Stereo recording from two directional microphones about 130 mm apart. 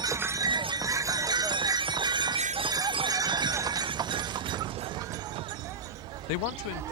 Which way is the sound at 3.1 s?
30° right (ahead or behind).